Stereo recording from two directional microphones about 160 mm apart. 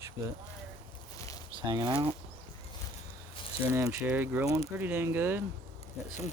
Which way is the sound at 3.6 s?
10° right (ahead or behind).